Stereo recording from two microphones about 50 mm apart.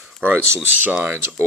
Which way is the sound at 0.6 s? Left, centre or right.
Right.